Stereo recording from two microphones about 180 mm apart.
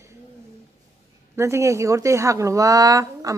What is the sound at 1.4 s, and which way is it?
Speech, 15° right (ahead or behind).